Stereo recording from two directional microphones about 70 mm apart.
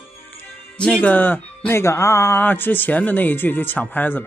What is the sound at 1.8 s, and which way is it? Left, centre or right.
Speech, left.